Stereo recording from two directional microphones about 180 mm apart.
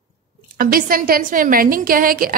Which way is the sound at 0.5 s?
55° right (ahead or behind).